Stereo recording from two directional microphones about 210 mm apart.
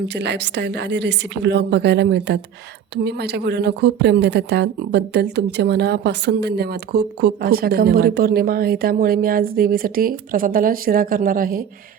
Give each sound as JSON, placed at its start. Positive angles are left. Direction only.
{"t": 0.1, "sound": "a woman's voice", "side_deg": -55}